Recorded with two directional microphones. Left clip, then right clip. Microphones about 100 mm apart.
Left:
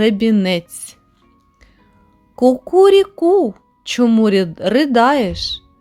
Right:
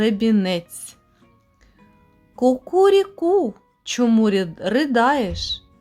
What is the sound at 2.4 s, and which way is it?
Speech, 55° left (ahead or behind).